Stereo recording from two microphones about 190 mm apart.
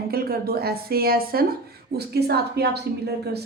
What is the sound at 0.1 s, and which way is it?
A woman's voice, 50° right (ahead or behind).